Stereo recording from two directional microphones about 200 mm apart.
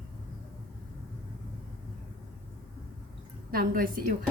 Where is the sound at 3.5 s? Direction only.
45° right (ahead or behind).